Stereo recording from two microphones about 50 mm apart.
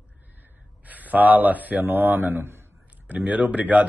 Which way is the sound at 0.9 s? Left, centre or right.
Right.